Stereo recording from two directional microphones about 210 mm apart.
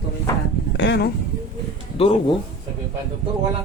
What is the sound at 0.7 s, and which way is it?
Speech, 55° left (ahead or behind).